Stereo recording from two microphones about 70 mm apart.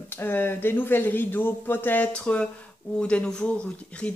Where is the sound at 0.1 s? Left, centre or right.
Left.